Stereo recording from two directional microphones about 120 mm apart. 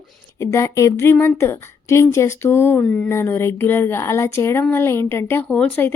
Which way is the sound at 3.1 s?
20° left (ahead or behind).